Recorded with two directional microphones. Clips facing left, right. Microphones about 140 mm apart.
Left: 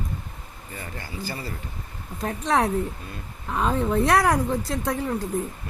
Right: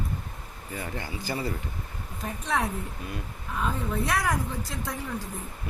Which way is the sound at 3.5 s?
70° left (ahead or behind).